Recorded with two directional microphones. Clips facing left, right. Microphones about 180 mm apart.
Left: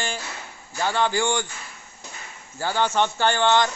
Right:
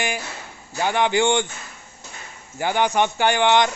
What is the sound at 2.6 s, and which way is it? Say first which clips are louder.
Speech: right 2 dB; 15° right (ahead or behind).